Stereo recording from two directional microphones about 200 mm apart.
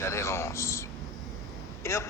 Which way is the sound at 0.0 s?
15° left (ahead or behind).